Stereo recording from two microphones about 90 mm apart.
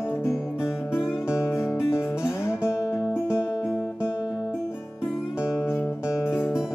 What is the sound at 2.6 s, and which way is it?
Music, 35° left (ahead or behind).